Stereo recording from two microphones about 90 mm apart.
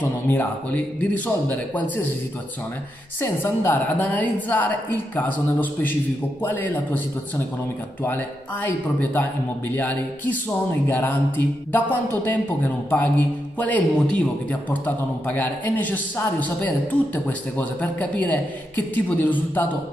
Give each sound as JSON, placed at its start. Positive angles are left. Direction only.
{"t": 0.3, "sound": "a man's voice", "side_deg": 20}
{"t": 3.2, "sound": "a man's voice", "side_deg": 25}